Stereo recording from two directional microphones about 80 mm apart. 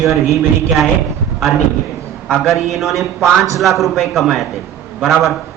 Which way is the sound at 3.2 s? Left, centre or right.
Right.